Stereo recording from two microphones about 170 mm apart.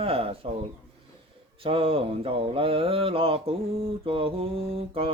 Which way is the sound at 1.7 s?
35° right (ahead or behind).